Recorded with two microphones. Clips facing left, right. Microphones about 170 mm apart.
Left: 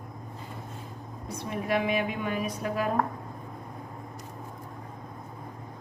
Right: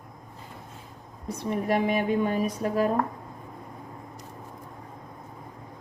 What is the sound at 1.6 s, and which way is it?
A woman's voice, 40° right (ahead or behind).